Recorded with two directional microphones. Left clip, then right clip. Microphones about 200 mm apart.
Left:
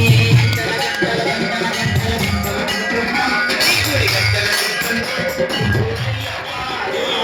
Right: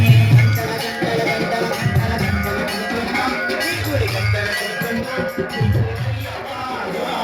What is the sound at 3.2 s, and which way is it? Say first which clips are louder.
Music: left 5 dB; 25° right (ahead or behind).